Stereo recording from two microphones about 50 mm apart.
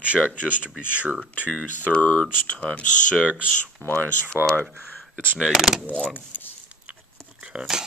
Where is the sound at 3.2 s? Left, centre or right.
Right.